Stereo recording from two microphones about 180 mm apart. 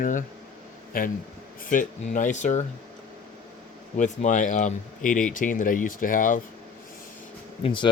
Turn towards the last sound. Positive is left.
turn(degrees=30)  # may be behind; listen again after turning